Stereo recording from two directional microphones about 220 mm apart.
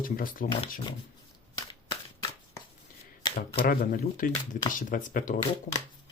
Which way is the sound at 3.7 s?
40° left (ahead or behind).